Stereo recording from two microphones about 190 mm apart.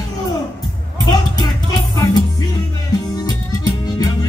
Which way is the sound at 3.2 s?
20° left (ahead or behind).